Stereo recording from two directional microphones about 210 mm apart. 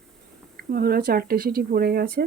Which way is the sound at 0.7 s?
45° right (ahead or behind).